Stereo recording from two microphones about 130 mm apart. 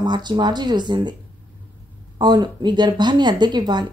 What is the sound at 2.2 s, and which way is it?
Speech, 30° right (ahead or behind).